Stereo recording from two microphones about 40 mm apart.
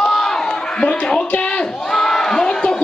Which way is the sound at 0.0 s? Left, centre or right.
Centre.